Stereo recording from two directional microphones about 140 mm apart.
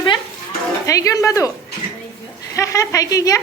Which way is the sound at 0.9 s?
25° left (ahead or behind).